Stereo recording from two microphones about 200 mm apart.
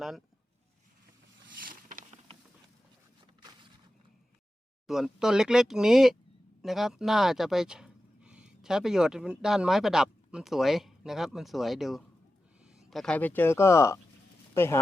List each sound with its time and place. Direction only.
1.5 s boat: 45° right (ahead or behind)
4.9 s speech: centre (ahead or behind)